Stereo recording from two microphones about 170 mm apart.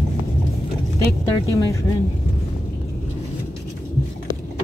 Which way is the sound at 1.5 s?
20° left (ahead or behind).